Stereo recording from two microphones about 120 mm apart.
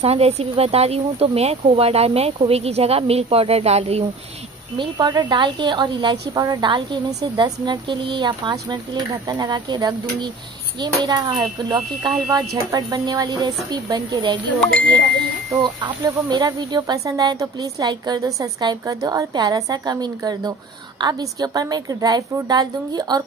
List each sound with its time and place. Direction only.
0.0 s speech: 60° right (ahead or behind)
4.7 s a woman's voice: 35° right (ahead or behind)
15.6 s a woman's voice: 40° right (ahead or behind)